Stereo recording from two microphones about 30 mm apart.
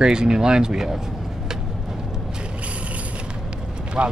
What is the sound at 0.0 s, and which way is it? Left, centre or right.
Speech, right.